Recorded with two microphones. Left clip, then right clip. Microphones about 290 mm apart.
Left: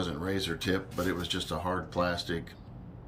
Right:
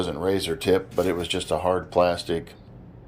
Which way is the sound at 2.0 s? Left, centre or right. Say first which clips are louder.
Right 9 dB; centre.